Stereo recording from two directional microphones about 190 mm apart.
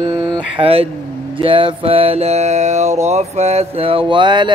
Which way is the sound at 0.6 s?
30° right (ahead or behind).